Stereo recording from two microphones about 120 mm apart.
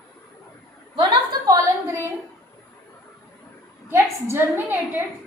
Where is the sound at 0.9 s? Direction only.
40° right (ahead or behind).